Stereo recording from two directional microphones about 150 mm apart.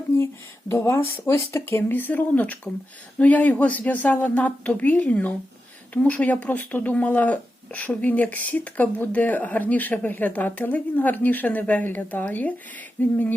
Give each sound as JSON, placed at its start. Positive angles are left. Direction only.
{"t": 0.7, "sound": "speech", "side_deg": 15}